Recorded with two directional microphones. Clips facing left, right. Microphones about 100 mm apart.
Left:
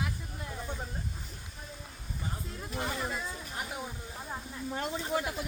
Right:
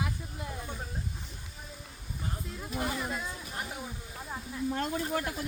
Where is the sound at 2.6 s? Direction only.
5° right (ahead or behind).